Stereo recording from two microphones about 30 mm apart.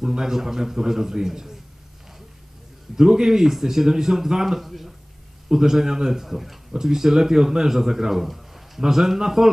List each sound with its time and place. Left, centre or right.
0.2 s speech: centre
3.0 s speech: centre
6.2 s speech: centre